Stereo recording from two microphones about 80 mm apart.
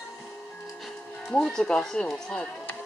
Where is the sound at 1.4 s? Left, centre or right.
Centre.